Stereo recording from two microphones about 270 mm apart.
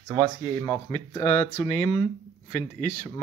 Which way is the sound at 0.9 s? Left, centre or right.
Left.